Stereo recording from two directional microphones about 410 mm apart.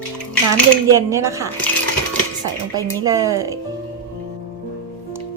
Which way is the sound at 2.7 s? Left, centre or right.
Centre.